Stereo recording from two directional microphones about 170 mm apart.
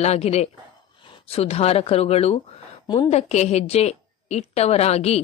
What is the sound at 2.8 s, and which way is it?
Speech, 25° left (ahead or behind).